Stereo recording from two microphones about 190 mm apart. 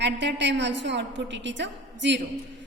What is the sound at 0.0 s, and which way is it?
A woman's voice, 65° right (ahead or behind).